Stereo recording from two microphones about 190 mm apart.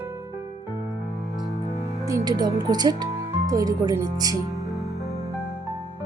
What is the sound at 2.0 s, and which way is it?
Speech, 20° right (ahead or behind).